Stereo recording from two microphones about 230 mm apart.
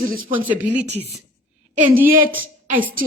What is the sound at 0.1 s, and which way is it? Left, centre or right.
Speech, right.